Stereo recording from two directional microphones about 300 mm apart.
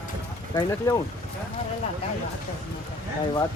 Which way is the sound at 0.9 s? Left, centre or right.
Centre.